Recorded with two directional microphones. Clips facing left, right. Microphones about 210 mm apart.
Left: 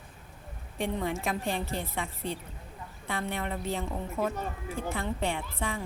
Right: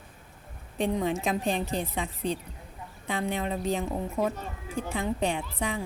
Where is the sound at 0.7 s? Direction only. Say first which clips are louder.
Right 4 dB; 20° right (ahead or behind).